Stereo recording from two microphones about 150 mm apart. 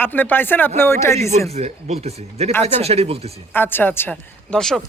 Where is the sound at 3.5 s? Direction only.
15° left (ahead or behind).